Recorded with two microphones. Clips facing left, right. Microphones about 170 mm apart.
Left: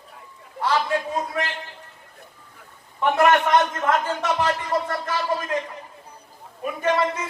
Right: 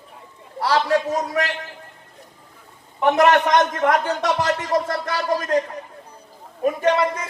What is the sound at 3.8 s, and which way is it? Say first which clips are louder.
Speech: right 3 dB; 75° right (ahead or behind).